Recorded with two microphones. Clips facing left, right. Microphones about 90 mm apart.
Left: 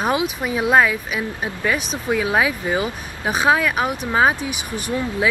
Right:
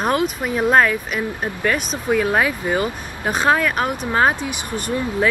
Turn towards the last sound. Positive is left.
turn(degrees=5)  # may be behind; listen again after turning